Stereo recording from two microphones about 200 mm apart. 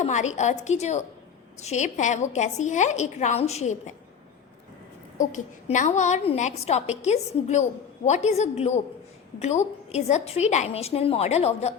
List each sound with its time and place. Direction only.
0.0 s a woman's voice: 35° left (ahead or behind)
5.2 s a woman's voice: 40° left (ahead or behind)